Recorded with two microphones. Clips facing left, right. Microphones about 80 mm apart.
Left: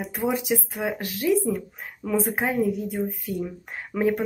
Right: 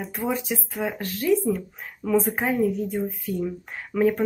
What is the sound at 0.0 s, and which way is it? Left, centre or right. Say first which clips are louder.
Speech: left 1 dB; centre.